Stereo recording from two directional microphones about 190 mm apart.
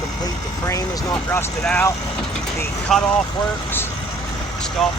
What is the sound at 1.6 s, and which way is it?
Speech, 5° left (ahead or behind).